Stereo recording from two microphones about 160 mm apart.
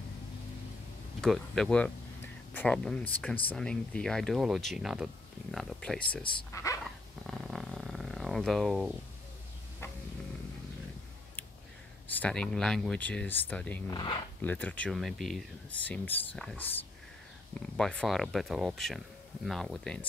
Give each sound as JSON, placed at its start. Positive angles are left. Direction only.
{"t": 1.2, "sound": "speech", "side_deg": 5}
{"t": 6.5, "sound": "dog", "side_deg": 20}
{"t": 6.8, "sound": "purr", "side_deg": 0}
{"t": 12.1, "sound": "speech", "side_deg": 10}
{"t": 13.8, "sound": "speech", "side_deg": 30}
{"t": 14.4, "sound": "speech", "side_deg": 10}